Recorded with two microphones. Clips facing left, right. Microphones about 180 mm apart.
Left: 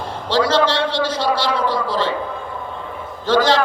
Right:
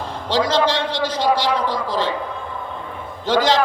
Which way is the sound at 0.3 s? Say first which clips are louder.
Left 2 dB; 15° right (ahead or behind).